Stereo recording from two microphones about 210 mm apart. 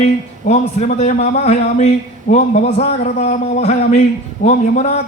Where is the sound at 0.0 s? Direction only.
30° left (ahead or behind).